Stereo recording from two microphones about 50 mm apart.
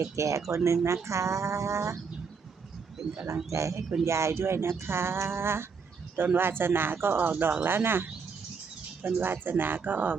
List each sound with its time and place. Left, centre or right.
0.2 s speech: right
0.5 s speech: right
3.5 s speech: right
4.0 s speech: right
9.2 s speech: right